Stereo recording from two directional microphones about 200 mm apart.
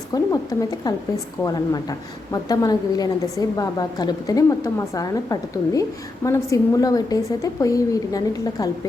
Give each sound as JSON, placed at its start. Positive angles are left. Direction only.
{"t": 0.1, "sound": "a woman's voice", "side_deg": 15}